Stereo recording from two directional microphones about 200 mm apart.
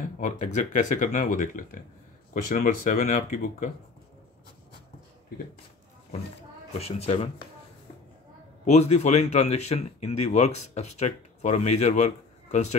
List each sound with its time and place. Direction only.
0.2 s speech: 40° left (ahead or behind)
6.8 s speech: 30° left (ahead or behind)
8.6 s speech: 35° left (ahead or behind)